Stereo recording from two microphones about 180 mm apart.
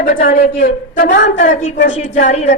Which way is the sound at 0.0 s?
50° left (ahead or behind).